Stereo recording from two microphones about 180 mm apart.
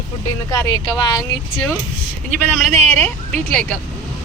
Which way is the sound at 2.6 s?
Centre (ahead or behind).